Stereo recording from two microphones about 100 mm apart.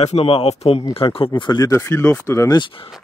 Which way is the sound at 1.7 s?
30° left (ahead or behind).